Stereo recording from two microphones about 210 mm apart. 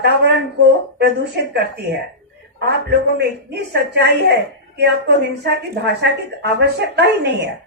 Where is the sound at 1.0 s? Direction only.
55° right (ahead or behind).